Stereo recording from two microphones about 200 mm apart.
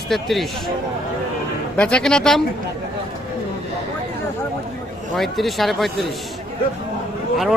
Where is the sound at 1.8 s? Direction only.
5° left (ahead or behind).